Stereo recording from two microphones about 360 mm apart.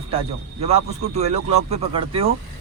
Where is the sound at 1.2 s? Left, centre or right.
Centre.